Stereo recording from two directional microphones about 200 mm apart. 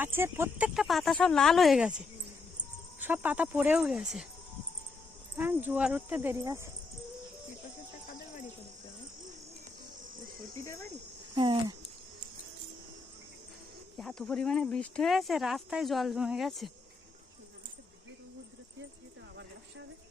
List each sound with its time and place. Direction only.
0.0 s speech: 10° right (ahead or behind)
3.0 s speech: 10° right (ahead or behind)
5.4 s speech: 10° right (ahead or behind)
11.3 s speech: 25° right (ahead or behind)
14.0 s speech: centre (ahead or behind)